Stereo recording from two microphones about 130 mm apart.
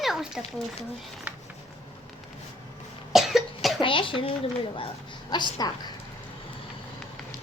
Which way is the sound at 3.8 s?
40° left (ahead or behind).